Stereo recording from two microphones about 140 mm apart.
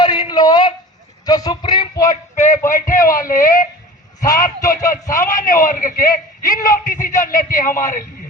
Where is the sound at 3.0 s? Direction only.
80° left.